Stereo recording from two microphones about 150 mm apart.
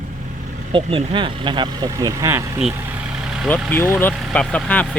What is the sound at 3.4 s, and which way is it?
Speech, 10° left (ahead or behind).